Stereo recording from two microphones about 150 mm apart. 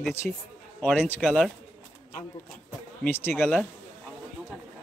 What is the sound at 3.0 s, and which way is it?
Speech, 15° left (ahead or behind).